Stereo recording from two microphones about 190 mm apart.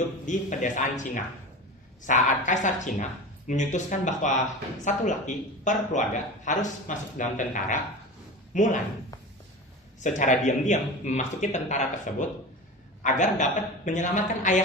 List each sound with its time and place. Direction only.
0.3 s speech: 40° left (ahead or behind)
10.0 s speech: 40° left (ahead or behind)